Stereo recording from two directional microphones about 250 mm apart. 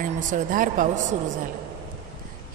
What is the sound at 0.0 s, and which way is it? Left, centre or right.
Speech, right.